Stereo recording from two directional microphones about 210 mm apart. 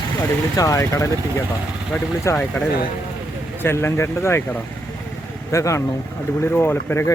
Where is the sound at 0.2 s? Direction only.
15° left (ahead or behind).